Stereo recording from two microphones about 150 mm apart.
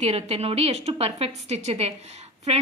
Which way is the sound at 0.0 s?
45° right (ahead or behind).